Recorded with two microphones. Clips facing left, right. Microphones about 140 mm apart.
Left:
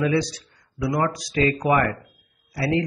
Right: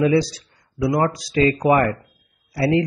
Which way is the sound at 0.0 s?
30° right (ahead or behind).